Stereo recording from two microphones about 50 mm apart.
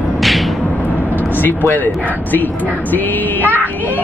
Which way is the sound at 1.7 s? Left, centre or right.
Left.